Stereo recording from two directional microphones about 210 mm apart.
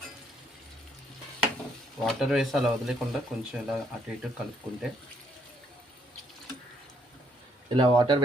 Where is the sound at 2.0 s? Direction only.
Centre (ahead or behind).